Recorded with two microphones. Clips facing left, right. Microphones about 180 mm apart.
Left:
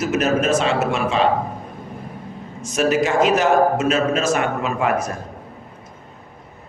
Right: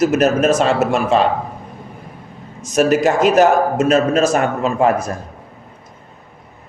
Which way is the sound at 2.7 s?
45° right (ahead or behind).